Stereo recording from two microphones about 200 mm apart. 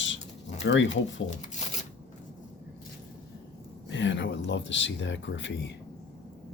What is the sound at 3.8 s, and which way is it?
Speech, 65° left (ahead or behind).